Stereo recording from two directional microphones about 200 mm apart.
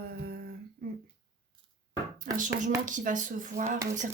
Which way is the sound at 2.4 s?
40° right (ahead or behind).